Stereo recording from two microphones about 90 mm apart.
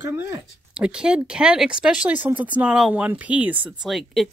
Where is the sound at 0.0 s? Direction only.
25° right (ahead or behind).